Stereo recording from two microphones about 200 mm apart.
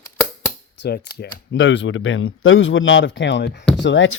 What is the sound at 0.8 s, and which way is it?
Speech, 55° left (ahead or behind).